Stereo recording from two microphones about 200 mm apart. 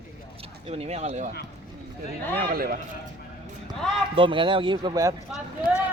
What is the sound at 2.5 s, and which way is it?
Speech, 45° right (ahead or behind).